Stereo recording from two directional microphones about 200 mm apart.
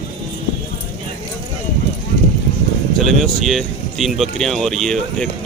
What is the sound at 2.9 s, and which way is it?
Speech, centre (ahead or behind).